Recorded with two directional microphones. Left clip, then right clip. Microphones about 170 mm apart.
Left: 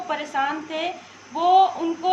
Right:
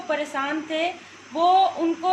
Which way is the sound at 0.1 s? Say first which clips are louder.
Even; 30° right (ahead or behind).